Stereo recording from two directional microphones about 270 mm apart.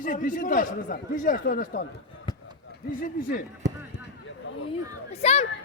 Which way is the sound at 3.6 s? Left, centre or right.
Right.